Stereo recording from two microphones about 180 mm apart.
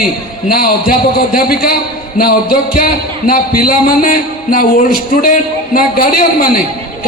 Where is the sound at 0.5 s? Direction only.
55° left (ahead or behind).